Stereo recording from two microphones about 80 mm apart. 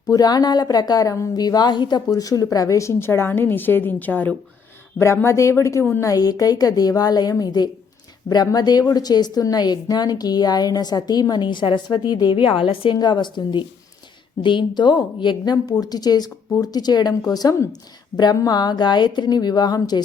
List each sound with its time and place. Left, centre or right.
0.0 s a woman's voice: left
1.4 s a woman's voice: left
4.9 s a woman's voice: left
6.0 s a woman's voice: left
14.8 s a woman's voice: left